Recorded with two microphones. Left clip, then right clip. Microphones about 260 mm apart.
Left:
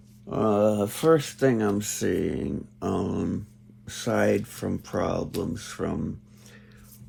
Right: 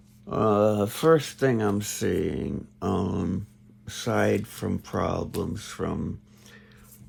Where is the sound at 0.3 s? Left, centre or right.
Right.